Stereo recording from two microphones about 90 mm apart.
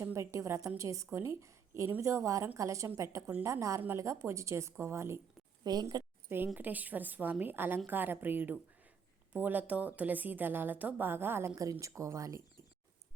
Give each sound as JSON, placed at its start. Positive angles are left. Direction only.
{"t": 0.0, "sound": "a woman's voice", "side_deg": -30}
{"t": 5.6, "sound": "speech", "side_deg": -45}
{"t": 6.2, "sound": "a woman's voice", "side_deg": -25}